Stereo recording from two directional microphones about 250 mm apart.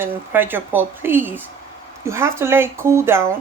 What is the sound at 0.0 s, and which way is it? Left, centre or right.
A woman's voice, centre.